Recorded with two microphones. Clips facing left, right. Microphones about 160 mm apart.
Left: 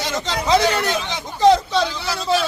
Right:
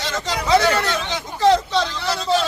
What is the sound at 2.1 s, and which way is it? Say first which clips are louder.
Speech: right 2 dB; 5° left (ahead or behind).